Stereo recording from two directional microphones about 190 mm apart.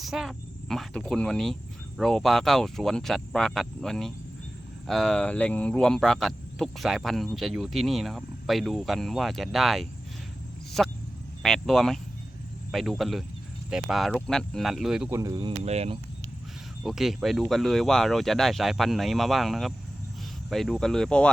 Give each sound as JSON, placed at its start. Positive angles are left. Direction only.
{"t": 0.0, "sound": "speech", "side_deg": 0}
{"t": 15.1, "sound": "speech", "side_deg": -15}
{"t": 16.8, "sound": "speech", "side_deg": 0}